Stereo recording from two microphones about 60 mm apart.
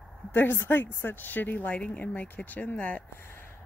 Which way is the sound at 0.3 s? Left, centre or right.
Left.